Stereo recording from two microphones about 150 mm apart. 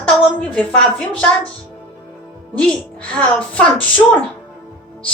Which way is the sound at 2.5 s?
5° left (ahead or behind).